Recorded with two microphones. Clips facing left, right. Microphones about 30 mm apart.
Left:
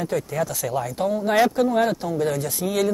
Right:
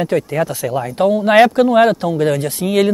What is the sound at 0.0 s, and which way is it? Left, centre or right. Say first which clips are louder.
Speech: right 7 dB; right.